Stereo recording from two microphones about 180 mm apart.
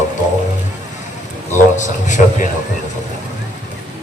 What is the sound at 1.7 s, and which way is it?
Speech, 40° left (ahead or behind).